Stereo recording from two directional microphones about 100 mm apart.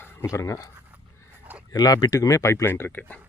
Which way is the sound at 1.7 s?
40° left (ahead or behind).